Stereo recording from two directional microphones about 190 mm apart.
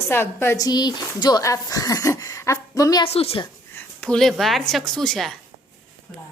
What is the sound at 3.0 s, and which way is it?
Speech, 30° left (ahead or behind).